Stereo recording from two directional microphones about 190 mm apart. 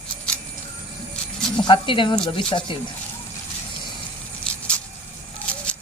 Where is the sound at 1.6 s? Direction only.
25° left (ahead or behind).